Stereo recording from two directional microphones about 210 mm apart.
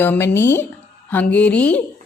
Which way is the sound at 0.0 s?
10° left (ahead or behind).